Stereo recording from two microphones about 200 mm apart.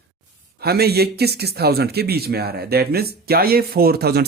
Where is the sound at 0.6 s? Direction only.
50° right (ahead or behind).